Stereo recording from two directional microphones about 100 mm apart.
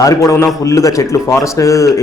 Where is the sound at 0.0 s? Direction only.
35° left (ahead or behind).